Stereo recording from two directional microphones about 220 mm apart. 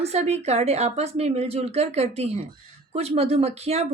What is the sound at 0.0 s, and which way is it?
Speech, 30° right (ahead or behind).